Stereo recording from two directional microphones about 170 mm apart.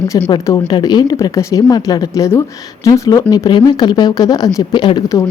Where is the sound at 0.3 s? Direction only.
20° left (ahead or behind).